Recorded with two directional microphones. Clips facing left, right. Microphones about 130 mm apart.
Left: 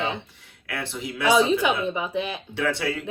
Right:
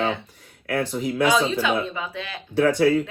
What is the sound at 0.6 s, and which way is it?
Speech, 45° right (ahead or behind).